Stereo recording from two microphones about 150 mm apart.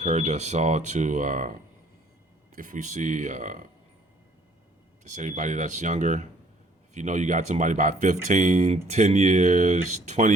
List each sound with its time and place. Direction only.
0.0 s speech: 50° right (ahead or behind)
2.6 s speech: 60° right (ahead or behind)
5.0 s speech: 55° right (ahead or behind)